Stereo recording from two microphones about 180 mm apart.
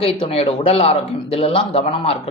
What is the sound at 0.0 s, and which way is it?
Speech, 30° left (ahead or behind).